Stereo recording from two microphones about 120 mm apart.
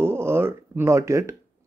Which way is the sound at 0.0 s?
20° right (ahead or behind).